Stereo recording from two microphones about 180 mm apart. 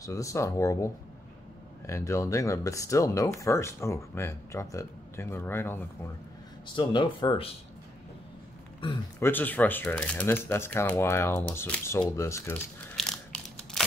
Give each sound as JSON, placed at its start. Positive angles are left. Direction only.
{"t": 0.0, "sound": "speech", "side_deg": 15}
{"t": 6.7, "sound": "speech", "side_deg": 25}
{"t": 9.2, "sound": "speech", "side_deg": 10}
{"t": 12.9, "sound": "crushing", "side_deg": 0}